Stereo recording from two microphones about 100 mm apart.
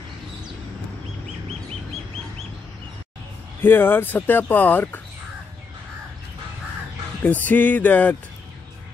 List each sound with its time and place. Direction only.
3.6 s speech: 20° left (ahead or behind)
7.2 s music: 15° left (ahead or behind)